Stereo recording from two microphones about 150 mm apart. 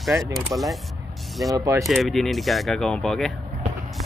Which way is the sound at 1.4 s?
25° right (ahead or behind).